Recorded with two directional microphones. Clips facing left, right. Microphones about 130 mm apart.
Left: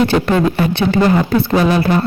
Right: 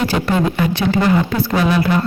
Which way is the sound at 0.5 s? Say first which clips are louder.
Left 2 dB; 25° left (ahead or behind).